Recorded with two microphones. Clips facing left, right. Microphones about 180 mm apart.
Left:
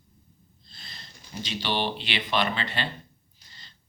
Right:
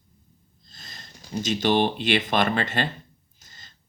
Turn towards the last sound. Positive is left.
turn(degrees=-45)  # may be behind; listen again after turning